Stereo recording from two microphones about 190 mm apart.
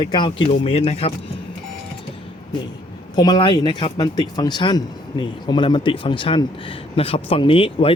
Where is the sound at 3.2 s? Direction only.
20° left (ahead or behind).